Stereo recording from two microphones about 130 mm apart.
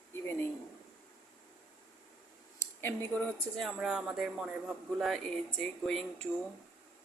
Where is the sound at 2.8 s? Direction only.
20° left (ahead or behind).